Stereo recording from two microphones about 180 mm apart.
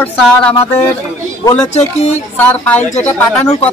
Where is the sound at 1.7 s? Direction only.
40° left (ahead or behind).